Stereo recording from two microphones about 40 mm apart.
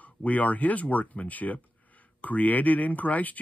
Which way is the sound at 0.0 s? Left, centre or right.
Left.